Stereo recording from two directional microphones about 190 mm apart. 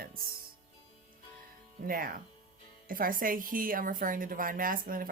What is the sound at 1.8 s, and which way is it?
A woman's voice, 50° right (ahead or behind).